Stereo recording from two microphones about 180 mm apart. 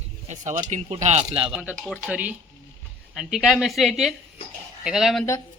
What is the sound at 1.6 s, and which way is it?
Speech, 5° right (ahead or behind).